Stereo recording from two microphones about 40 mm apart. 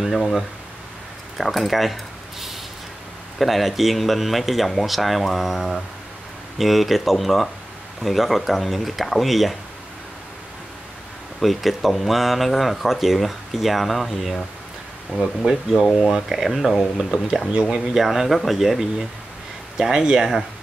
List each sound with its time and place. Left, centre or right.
0.0 s speech: centre
3.3 s speech: centre
11.3 s speech: centre
15.1 s speech: centre
17.5 s speech: right
17.7 s speech: centre